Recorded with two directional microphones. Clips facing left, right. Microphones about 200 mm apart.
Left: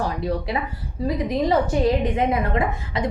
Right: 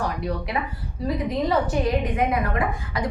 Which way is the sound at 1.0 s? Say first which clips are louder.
Left 2 dB; 20° left (ahead or behind).